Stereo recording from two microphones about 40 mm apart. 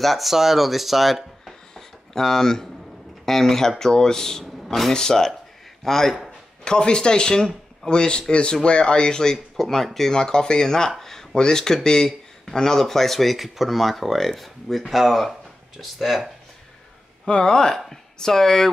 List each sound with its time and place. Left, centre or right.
0.0 s speech: centre
6.6 s speech: centre
11.0 s a sound: centre
11.3 s speech: centre
17.3 s speech: left